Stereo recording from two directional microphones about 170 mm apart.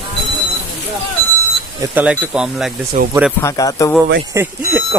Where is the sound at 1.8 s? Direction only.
10° right (ahead or behind).